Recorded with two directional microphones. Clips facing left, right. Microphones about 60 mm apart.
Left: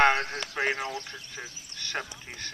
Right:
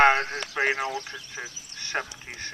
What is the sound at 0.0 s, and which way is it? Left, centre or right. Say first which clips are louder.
Speech: right 3 dB; right.